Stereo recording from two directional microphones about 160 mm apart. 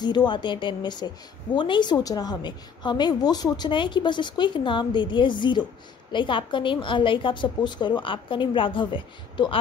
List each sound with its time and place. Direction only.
0.0 s a woman's voice: 25° left (ahead or behind)